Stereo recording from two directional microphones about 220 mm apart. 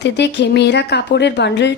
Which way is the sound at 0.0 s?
50° left (ahead or behind).